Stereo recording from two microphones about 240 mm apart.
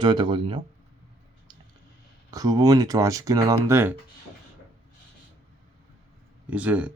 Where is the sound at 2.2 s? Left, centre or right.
Centre.